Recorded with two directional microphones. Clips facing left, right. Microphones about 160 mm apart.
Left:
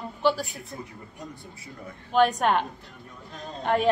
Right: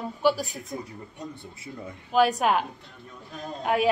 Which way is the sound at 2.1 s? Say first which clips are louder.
Even; 5° right (ahead or behind).